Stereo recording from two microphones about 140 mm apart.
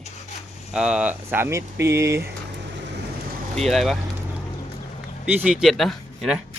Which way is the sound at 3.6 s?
Centre (ahead or behind).